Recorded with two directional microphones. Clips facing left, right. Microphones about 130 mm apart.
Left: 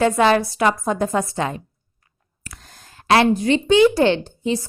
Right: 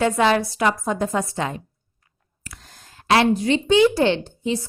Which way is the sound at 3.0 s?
50° left (ahead or behind).